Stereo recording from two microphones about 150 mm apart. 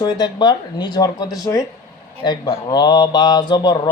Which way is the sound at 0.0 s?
30° left (ahead or behind).